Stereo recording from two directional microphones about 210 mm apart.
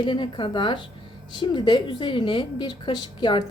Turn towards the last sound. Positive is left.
turn(degrees=20)  # may be behind; listen again after turning